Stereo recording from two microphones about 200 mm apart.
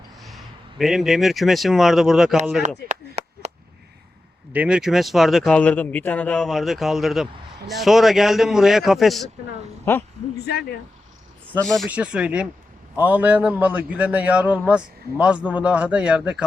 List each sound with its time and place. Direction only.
0.3 s speech: centre (ahead or behind)
2.9 s chop: 35° right (ahead or behind)
4.5 s speech: 5° right (ahead or behind)
9.9 s a man's voice: 10° left (ahead or behind)
10.3 s speech: 55° left (ahead or behind)
11.6 s a man's voice: centre (ahead or behind)